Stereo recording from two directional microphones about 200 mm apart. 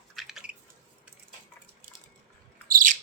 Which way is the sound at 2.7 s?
40° right (ahead or behind).